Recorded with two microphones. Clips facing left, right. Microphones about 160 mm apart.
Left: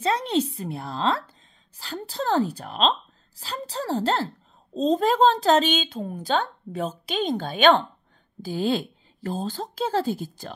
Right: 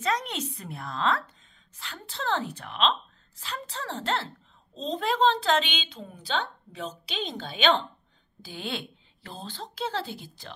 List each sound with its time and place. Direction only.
0.0 s a woman's voice: 30° left (ahead or behind); by 7.8 s 50° left (ahead or behind)
8.4 s a woman's voice: 40° left (ahead or behind)